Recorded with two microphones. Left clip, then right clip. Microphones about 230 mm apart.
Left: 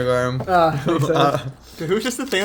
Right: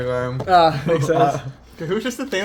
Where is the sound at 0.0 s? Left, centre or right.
Left.